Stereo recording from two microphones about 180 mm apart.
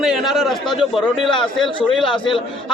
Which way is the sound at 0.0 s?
Centre (ahead or behind).